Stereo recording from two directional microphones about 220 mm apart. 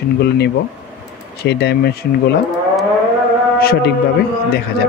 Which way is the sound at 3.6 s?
45° left (ahead or behind).